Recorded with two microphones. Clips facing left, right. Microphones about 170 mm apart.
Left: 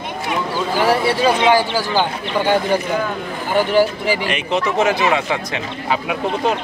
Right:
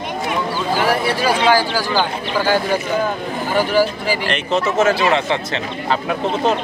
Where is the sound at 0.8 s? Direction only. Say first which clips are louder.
Left 4 dB; 25° left (ahead or behind).